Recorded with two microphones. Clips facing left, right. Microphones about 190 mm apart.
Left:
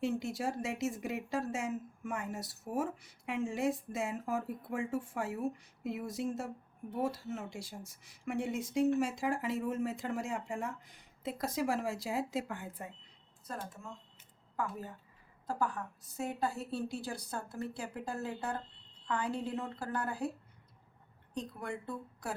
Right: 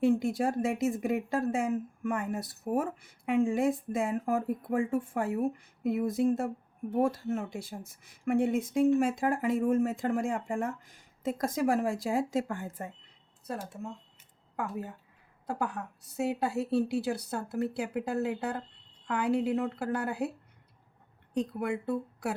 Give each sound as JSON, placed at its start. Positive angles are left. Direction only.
{"t": 0.0, "sound": "a woman's voice", "side_deg": -55}
{"t": 15.6, "sound": "a woman's voice", "side_deg": -65}
{"t": 21.3, "sound": "a woman's voice", "side_deg": -65}